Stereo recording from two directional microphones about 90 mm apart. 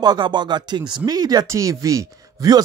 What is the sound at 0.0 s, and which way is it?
Speech, 55° right (ahead or behind).